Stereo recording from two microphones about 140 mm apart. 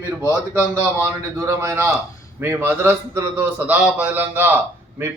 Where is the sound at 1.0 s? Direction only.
20° right (ahead or behind).